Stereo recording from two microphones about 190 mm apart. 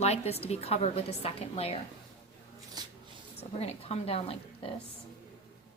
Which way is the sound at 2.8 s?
20° right (ahead or behind).